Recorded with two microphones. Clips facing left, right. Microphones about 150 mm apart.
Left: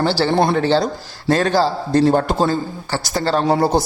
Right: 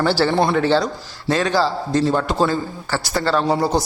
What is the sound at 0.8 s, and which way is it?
Speech, 45° left (ahead or behind).